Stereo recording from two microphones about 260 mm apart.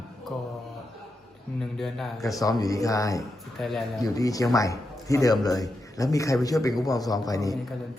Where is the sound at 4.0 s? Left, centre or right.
Centre.